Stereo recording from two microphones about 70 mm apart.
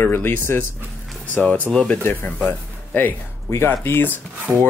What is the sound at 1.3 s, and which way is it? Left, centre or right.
Speech, centre.